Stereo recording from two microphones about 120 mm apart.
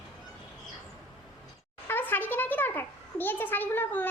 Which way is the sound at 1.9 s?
15° left (ahead or behind).